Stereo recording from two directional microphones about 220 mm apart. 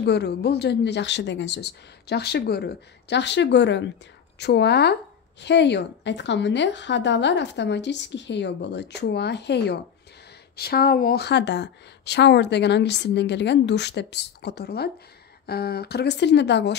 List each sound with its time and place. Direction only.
0.0 s a woman's voice: 50° left (ahead or behind)